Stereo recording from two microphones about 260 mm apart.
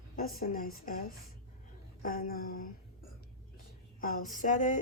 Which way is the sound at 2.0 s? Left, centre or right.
Left.